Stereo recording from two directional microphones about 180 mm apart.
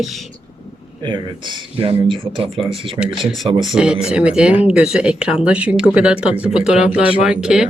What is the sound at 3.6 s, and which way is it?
Speech, 5° right (ahead or behind).